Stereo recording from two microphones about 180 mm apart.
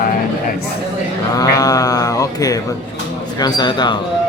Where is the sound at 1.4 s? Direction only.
20° left (ahead or behind).